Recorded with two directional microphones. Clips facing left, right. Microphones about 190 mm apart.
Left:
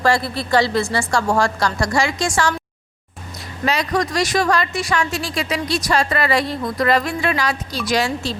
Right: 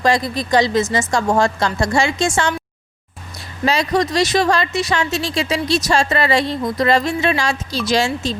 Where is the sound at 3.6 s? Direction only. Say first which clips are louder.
Right 3 dB; 25° right (ahead or behind).